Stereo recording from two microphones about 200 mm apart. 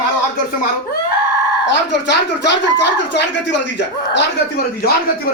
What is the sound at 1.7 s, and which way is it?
Speech, 60° left (ahead or behind).